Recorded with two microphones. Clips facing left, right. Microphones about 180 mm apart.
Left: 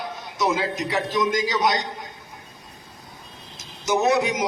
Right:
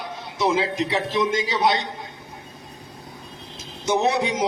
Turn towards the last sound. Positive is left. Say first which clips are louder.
# left 1 dB
turn(degrees=-30)  # may be behind; listen again after turning